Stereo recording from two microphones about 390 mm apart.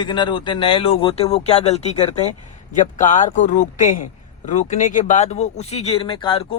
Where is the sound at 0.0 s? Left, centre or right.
Centre.